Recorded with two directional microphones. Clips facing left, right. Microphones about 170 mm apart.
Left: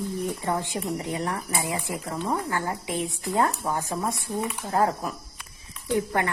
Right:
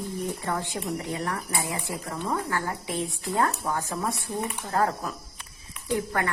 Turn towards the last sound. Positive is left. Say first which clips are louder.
# left 2 dB
turn(degrees=20)  # may be behind; listen again after turning